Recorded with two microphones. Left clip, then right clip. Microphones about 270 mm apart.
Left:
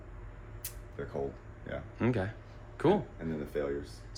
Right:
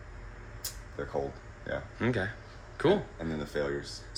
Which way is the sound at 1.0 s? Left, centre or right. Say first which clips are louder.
Right 3 dB; centre.